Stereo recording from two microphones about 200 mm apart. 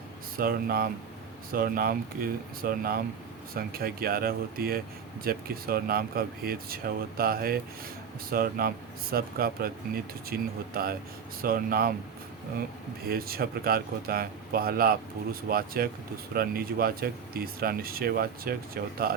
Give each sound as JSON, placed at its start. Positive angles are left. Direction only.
{"t": 0.3, "sound": "speech", "side_deg": -50}
{"t": 13.1, "sound": "speech", "side_deg": -50}